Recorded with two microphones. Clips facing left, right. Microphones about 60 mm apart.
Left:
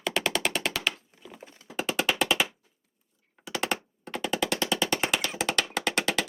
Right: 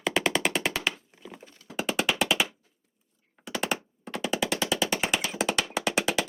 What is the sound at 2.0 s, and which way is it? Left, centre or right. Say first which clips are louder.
Music: even; centre.